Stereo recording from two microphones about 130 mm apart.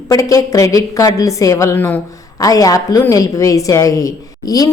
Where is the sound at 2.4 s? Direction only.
25° left (ahead or behind).